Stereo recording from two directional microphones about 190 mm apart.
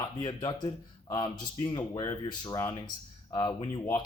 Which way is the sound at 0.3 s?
20° left (ahead or behind).